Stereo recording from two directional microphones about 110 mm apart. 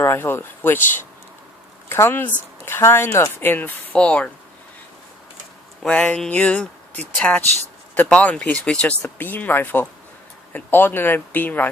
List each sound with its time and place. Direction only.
0.0 s speech: 20° left (ahead or behind)
5.8 s speech: 10° left (ahead or behind)